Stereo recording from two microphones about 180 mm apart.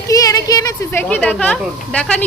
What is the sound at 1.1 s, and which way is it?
A woman's voice, 5° left (ahead or behind).